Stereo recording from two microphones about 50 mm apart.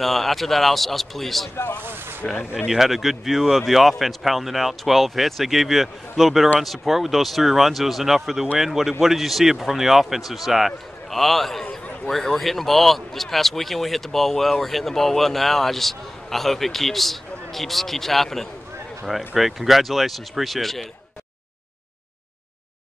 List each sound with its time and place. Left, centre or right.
0.0 s speech: centre
1.8 s a sound: right
2.2 s speech: centre